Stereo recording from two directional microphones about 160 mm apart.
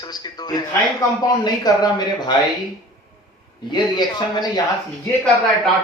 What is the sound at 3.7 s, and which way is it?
Speech, 25° left (ahead or behind).